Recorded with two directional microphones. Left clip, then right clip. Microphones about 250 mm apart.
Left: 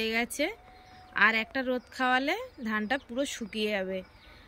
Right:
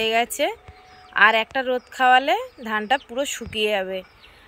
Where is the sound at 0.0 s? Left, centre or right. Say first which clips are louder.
Right 9 dB; centre.